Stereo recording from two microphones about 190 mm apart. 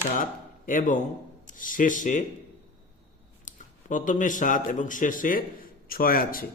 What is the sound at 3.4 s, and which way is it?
A man's voice, 40° left (ahead or behind).